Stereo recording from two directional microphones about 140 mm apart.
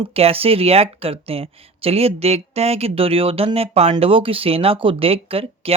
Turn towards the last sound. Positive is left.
turn(degrees=-45)  # may be behind; listen again after turning